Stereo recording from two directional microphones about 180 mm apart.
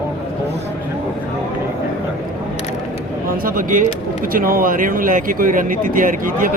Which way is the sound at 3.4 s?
50° right (ahead or behind).